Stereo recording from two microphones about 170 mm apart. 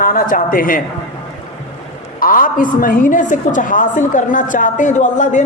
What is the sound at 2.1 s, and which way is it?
A woman's voice, 55° left (ahead or behind).